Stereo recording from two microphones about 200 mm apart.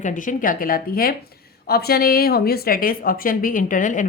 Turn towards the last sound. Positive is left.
turn(degrees=40)  # may be behind; listen again after turning